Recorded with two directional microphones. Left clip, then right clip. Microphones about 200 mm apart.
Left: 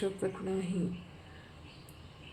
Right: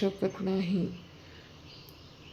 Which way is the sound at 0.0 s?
30° right (ahead or behind).